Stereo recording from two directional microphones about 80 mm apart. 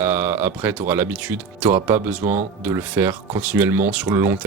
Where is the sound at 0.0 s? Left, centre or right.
Right.